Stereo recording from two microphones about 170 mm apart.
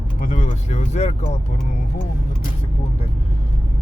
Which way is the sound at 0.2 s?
45° left (ahead or behind).